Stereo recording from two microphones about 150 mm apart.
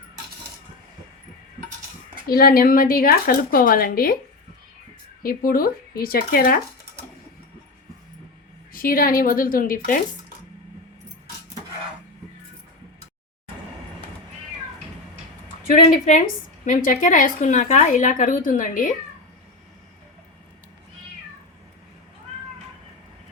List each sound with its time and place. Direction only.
2.2 s speech: 85° left
5.2 s speech: 70° left (ahead or behind)
6.0 s speech: 85° left
8.7 s speech: 70° left (ahead or behind)
15.6 s a woman's voice: 65° left (ahead or behind)